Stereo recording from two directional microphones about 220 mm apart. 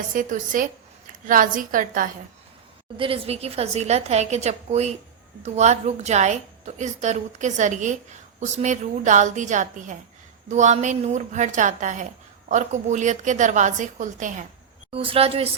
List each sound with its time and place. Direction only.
0.1 s a woman's voice: 35° right (ahead or behind)
3.0 s a woman's voice: 25° right (ahead or behind)